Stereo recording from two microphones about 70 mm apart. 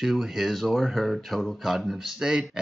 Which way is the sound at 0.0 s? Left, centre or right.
Centre.